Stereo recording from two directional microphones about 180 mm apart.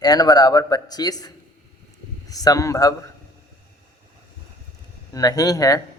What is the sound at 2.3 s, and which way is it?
Speech, 20° left (ahead or behind).